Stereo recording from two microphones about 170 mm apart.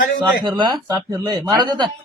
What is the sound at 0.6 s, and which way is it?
Speech, 25° right (ahead or behind).